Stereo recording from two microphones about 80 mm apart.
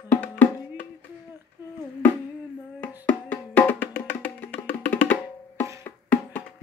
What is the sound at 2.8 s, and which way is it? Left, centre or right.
Music, centre.